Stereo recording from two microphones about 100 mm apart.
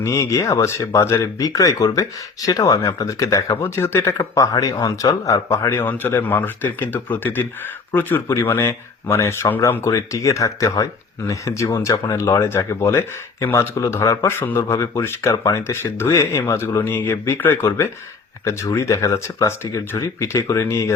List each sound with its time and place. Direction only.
0.0 s speech: 30° left (ahead or behind)
4.5 s speech: 40° left (ahead or behind)